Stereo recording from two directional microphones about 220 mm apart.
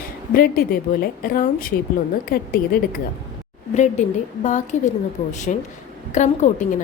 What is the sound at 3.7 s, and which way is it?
A woman's voice, 30° left (ahead or behind).